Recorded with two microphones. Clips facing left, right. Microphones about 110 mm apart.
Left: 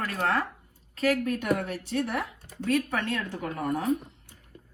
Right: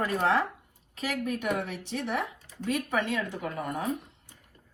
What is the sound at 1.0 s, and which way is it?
Speech, 5° right (ahead or behind).